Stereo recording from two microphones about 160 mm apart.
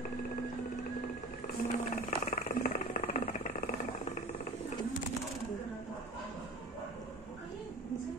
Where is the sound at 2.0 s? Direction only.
50° left (ahead or behind).